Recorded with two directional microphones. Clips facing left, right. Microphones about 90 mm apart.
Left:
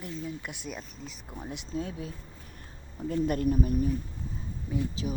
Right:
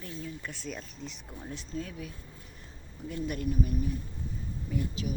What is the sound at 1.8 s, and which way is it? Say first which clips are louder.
Speech: left 4 dB; 30° left (ahead or behind).